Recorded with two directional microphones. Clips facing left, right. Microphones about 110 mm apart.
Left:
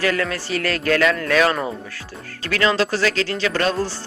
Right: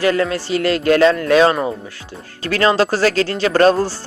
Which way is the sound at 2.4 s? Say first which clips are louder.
Right 4 dB; 35° right (ahead or behind).